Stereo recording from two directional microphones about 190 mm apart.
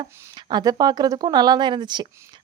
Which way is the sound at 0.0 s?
25° right (ahead or behind).